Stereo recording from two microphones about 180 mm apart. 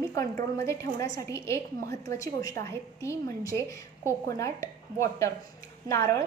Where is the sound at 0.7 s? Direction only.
20° left (ahead or behind).